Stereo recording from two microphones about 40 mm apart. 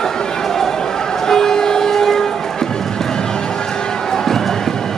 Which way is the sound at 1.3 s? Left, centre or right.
Centre.